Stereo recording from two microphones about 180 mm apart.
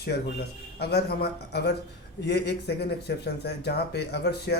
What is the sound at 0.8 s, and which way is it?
Speech, 65° left (ahead or behind).